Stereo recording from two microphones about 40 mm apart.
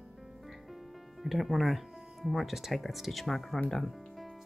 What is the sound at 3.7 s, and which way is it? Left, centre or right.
Music, centre.